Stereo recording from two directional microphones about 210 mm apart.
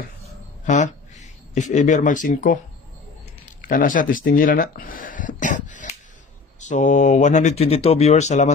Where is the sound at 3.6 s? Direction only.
40° left (ahead or behind).